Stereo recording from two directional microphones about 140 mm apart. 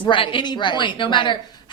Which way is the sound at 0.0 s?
35° left (ahead or behind).